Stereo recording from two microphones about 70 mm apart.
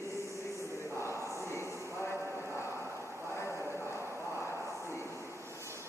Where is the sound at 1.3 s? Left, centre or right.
Left.